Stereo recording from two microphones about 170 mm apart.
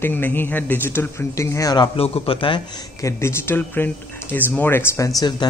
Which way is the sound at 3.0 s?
15° left (ahead or behind).